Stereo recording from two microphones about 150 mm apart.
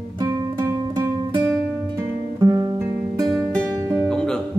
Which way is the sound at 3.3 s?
5° right (ahead or behind).